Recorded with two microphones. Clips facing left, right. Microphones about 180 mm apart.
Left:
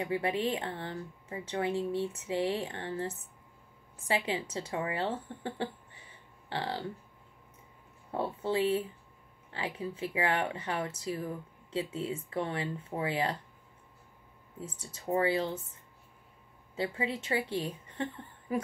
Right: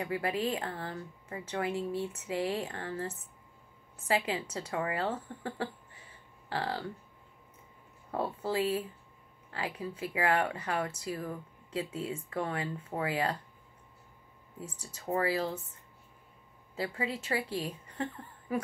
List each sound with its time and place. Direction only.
0.0 s speech: 25° left (ahead or behind)
4.1 s speech: 30° left (ahead or behind)
8.1 s speech: 25° left (ahead or behind)
15.1 s speech: 25° left (ahead or behind)
16.7 s speech: 25° left (ahead or behind)